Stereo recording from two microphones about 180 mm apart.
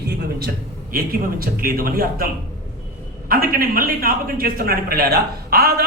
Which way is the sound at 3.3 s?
55° right (ahead or behind).